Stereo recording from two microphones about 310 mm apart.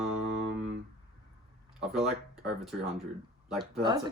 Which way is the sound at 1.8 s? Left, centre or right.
Centre.